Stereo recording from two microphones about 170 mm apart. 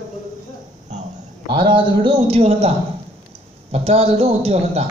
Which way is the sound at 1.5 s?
30° right (ahead or behind).